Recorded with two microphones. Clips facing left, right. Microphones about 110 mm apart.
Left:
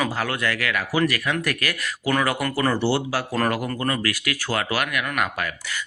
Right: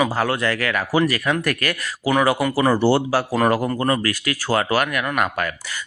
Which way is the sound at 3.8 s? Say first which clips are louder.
Right 4 dB; 30° right (ahead or behind).